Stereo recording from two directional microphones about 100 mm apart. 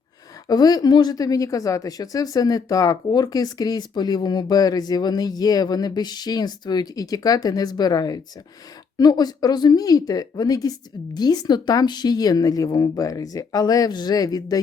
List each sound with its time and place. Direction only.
0.4 s a woman's voice: 40° left (ahead or behind)